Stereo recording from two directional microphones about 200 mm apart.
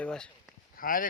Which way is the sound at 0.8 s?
45° left (ahead or behind).